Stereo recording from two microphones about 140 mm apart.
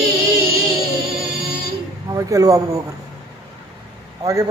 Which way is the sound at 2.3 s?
25° right (ahead or behind).